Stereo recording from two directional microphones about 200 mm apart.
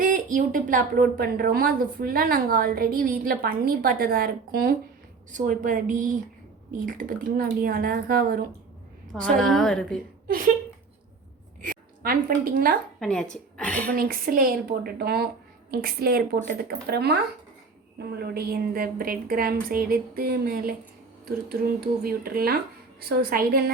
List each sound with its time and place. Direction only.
0.0 s a woman's voice: 40° right (ahead or behind)
9.2 s a woman's voice: centre (ahead or behind)
10.2 s a sound: 45° right (ahead or behind)
11.6 s a woman's voice: 45° right (ahead or behind)
13.0 s a woman's voice: 5° left (ahead or behind)
13.9 s a woman's voice: 45° right (ahead or behind)
18.2 s a woman's voice: 50° right (ahead or behind)